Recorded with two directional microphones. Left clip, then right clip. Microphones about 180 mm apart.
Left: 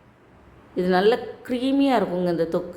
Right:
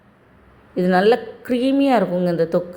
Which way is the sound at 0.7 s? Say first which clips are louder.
Right 4 dB; 15° right (ahead or behind).